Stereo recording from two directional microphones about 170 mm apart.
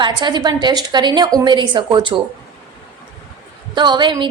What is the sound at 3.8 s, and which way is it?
Speech, 25° right (ahead or behind).